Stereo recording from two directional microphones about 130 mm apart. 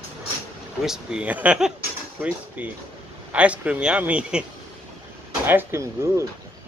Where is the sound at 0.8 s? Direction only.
5° right (ahead or behind).